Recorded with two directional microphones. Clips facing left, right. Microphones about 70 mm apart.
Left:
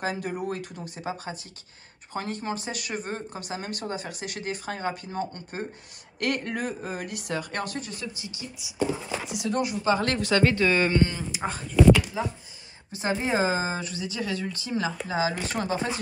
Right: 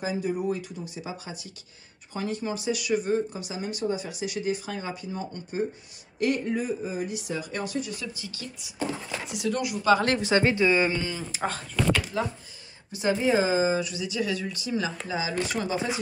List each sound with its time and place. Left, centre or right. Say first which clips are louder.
0.0 s speech: right 2 dB; left
8.0 s speech: even; centre
8.5 s speech: left 4 dB; centre
9.3 s a woman's voice: even; left
10.3 s speech: even; centre
11.3 s speech: left 7 dB; centre
12.9 s a woman's voice: right 3 dB; left